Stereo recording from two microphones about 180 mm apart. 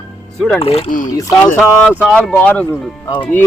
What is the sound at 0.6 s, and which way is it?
Speech, 35° left (ahead or behind).